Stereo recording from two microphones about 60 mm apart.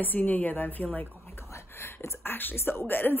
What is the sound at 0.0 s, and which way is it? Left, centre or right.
A woman's voice, left.